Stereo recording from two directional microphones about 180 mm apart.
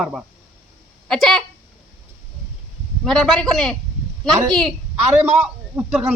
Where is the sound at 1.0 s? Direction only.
Centre (ahead or behind).